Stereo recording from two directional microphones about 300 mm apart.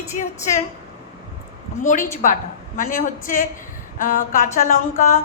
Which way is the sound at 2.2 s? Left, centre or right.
Left.